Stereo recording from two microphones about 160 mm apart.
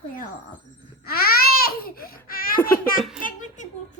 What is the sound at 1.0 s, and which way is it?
Baby cry, 70° left (ahead or behind).